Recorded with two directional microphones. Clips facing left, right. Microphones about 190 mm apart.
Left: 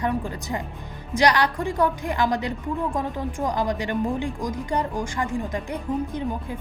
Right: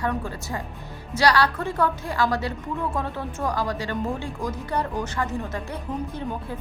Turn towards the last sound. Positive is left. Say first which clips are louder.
# left 2 dB
turn(degrees=15)  # may be behind; listen again after turning